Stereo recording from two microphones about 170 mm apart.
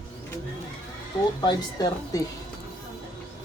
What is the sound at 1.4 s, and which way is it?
Speech, 25° left (ahead or behind).